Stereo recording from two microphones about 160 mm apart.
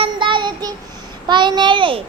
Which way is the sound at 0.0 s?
30° right (ahead or behind).